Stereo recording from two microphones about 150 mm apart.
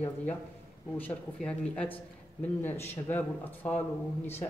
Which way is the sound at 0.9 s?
10° left (ahead or behind).